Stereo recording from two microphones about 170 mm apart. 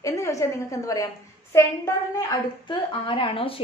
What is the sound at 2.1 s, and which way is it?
A woman's voice, 25° left (ahead or behind).